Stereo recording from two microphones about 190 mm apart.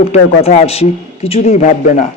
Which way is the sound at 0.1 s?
35° left (ahead or behind).